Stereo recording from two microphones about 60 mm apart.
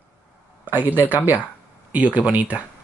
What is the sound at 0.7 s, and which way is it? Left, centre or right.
Speech, right.